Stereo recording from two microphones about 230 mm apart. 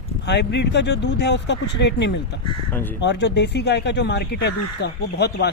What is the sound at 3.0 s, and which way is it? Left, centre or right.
Speech, left.